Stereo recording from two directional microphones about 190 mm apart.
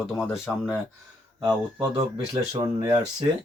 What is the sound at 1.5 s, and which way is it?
Speech, 25° right (ahead or behind).